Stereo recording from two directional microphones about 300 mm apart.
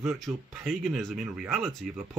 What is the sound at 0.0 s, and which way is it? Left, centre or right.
A man's voice, centre.